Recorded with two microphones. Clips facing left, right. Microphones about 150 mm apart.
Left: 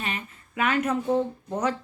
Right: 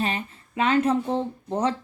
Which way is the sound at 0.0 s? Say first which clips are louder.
Right 6 dB; 30° right (ahead or behind).